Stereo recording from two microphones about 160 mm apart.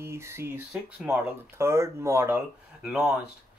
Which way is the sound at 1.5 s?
15° right (ahead or behind).